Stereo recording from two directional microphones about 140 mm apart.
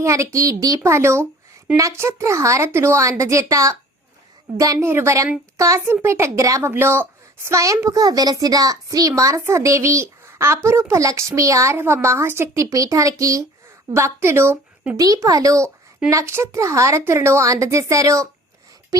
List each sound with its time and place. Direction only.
0.0 s a woman's voice: 20° right (ahead or behind)